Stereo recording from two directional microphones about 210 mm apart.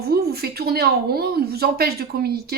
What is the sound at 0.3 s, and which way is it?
Speech, 45° right (ahead or behind).